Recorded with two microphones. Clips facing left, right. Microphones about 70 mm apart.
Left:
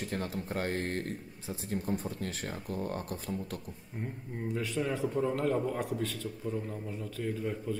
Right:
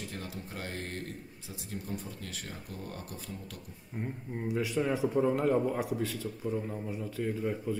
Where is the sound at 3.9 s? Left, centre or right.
Centre.